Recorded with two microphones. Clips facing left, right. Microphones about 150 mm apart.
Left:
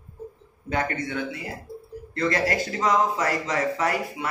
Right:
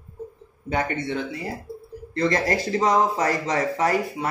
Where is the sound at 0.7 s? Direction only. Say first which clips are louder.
Right 2 dB; 25° right (ahead or behind).